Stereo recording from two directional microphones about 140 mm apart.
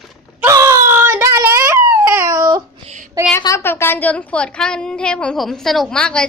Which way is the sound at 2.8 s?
60° right (ahead or behind).